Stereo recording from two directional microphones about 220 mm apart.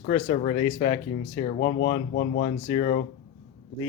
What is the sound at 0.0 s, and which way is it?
Speech, 30° left (ahead or behind).